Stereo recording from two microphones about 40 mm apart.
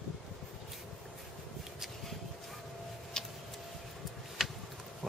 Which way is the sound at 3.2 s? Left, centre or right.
Centre.